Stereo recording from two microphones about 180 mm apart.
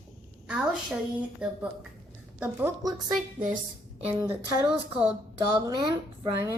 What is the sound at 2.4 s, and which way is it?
Speech, 10° right (ahead or behind).